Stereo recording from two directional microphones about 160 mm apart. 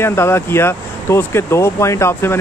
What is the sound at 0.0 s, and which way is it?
Speech, 15° left (ahead or behind).